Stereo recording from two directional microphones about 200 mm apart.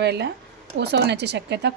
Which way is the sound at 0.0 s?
55° right (ahead or behind).